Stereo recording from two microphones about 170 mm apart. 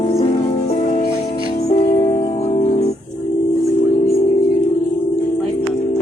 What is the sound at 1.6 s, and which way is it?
Music, 40° left (ahead or behind).